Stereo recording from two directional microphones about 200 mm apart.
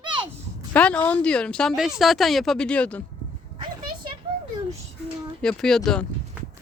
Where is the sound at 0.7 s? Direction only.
5° left (ahead or behind).